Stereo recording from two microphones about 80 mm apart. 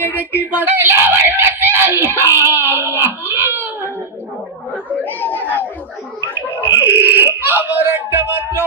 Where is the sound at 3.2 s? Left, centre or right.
Right.